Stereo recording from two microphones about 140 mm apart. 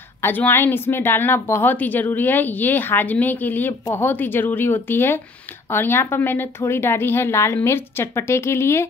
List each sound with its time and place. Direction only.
0.2 s a woman's voice: 15° left (ahead or behind)